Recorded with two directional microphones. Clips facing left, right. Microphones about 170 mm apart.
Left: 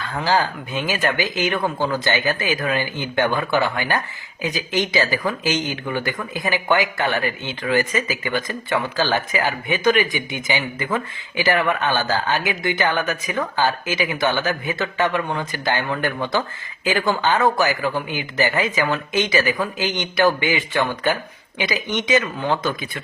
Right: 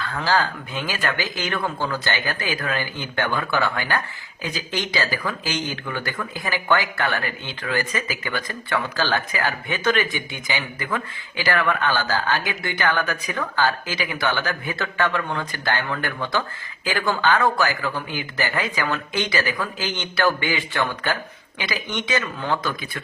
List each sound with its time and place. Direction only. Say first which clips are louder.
0.0 s speech: left 2 dB; 20° left (ahead or behind)